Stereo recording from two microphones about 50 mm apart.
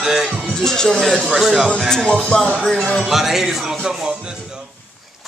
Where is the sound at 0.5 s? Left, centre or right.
Centre.